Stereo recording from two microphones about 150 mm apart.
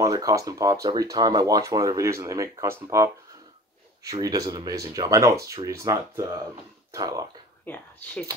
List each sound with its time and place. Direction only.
0.0 s speech: 20° right (ahead or behind)
7.6 s speech: 10° left (ahead or behind)